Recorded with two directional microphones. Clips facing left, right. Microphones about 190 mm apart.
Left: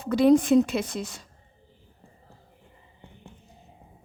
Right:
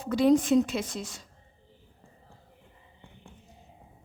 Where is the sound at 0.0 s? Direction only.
60° left (ahead or behind).